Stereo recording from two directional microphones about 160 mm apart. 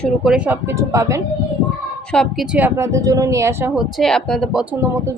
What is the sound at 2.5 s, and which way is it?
A woman's voice, 15° right (ahead or behind).